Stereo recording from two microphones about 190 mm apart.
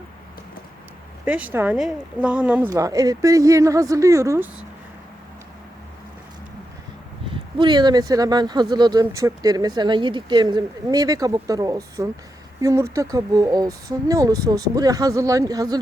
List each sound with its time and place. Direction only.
1.2 s speech: 10° right (ahead or behind)
7.6 s speech: 20° right (ahead or behind)